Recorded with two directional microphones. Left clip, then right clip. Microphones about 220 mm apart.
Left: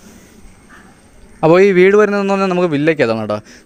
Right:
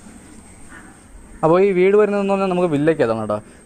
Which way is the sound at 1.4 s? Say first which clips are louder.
Left 5 dB; 50° left (ahead or behind).